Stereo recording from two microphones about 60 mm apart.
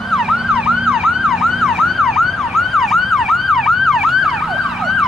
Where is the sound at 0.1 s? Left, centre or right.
Centre.